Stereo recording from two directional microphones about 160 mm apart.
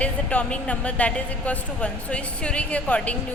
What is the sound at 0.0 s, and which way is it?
A woman's voice, 10° left (ahead or behind).